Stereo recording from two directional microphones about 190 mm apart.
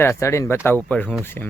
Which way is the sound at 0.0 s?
15° left (ahead or behind).